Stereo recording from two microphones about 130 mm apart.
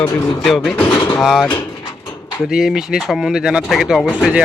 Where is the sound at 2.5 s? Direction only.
5° right (ahead or behind).